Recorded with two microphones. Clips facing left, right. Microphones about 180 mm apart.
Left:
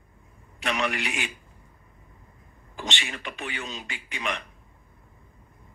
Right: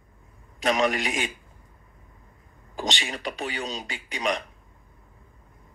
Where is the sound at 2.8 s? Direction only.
40° right (ahead or behind).